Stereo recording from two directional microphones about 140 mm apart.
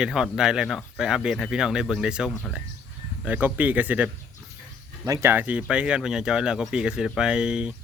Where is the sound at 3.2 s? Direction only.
10° right (ahead or behind).